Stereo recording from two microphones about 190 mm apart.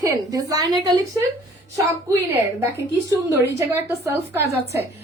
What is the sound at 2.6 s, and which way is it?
A woman's voice, 10° right (ahead or behind).